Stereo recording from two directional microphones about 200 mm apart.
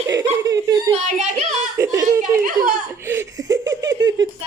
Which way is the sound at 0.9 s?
35° right (ahead or behind).